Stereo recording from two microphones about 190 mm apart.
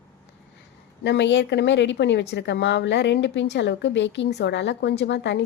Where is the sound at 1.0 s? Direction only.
65° left (ahead or behind).